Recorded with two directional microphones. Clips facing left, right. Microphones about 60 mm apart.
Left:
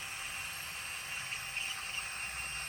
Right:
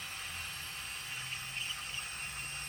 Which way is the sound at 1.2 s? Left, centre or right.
Left.